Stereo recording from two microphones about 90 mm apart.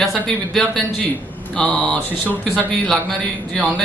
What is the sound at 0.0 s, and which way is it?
Speech, centre (ahead or behind).